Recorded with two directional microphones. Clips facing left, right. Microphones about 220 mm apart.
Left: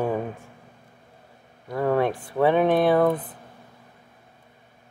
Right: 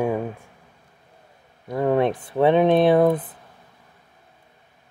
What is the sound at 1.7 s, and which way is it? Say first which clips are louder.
Speech: right 2 dB; 20° right (ahead or behind).